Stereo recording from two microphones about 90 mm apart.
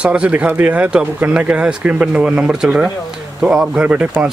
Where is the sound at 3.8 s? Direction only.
15° right (ahead or behind).